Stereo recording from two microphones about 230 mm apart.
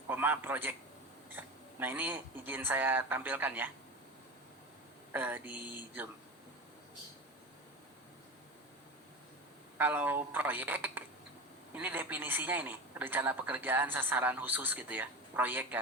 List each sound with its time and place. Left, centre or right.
0.1 s a man's voice: centre
5.1 s a man's voice: centre
9.7 s a man's voice: centre